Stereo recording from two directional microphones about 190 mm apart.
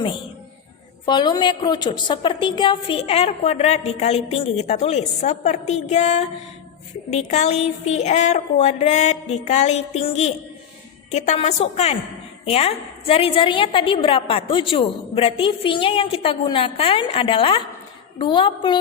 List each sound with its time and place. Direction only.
1.0 s a woman's voice: 25° left (ahead or behind)